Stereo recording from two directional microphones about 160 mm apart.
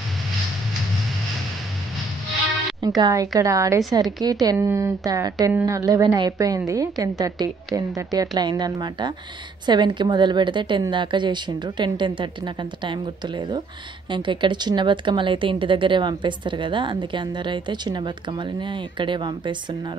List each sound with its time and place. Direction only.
3.0 s speech: 20° right (ahead or behind)